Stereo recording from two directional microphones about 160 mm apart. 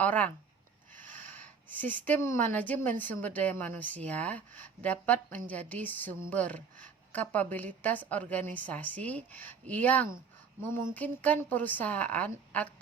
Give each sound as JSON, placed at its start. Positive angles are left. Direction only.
{"t": 0.0, "sound": "speech", "side_deg": 10}
{"t": 1.0, "sound": "a sound", "side_deg": 10}
{"t": 2.5, "sound": "speech", "side_deg": 10}